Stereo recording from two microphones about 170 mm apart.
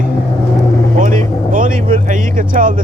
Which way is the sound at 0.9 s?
50° right (ahead or behind).